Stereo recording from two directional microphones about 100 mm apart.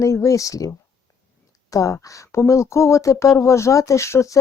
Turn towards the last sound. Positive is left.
turn(degrees=30)  # may be behind; listen again after turning